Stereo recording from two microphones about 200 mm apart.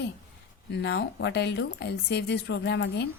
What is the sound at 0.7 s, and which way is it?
A woman's voice, 55° left (ahead or behind).